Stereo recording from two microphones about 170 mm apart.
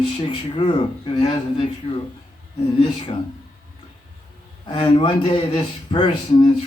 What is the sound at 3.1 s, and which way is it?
Speech, 30° left (ahead or behind).